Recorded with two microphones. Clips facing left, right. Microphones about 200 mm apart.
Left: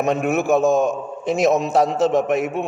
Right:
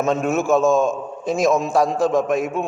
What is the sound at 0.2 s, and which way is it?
Speech, 60° left (ahead or behind).